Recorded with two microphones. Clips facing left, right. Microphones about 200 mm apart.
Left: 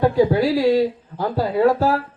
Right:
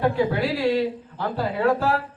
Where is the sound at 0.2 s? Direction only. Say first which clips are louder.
Left 6 dB; 40° left (ahead or behind).